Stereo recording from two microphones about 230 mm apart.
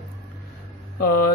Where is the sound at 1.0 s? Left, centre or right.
Left.